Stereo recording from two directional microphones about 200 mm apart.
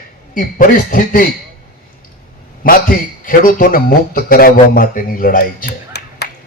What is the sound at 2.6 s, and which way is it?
A man's voice, 45° left (ahead or behind).